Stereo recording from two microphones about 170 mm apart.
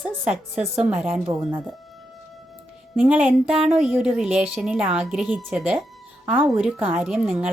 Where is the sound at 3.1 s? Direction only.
5° right (ahead or behind).